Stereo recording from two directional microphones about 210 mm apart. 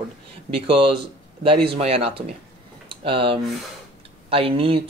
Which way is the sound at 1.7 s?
30° right (ahead or behind).